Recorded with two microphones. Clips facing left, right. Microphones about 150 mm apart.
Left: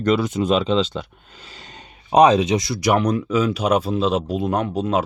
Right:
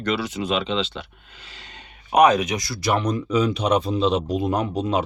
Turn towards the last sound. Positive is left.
turn(degrees=0)  # may be behind; listen again after turning